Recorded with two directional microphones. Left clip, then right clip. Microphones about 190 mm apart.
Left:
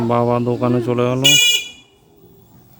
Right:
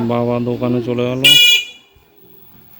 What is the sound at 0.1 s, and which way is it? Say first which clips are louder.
Speech: left 2 dB; 5° left (ahead or behind).